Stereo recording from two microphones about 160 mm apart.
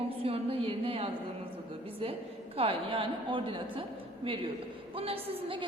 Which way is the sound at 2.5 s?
35° right (ahead or behind).